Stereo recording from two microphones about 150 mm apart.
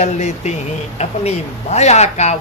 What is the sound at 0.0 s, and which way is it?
A man's voice, 50° left (ahead or behind).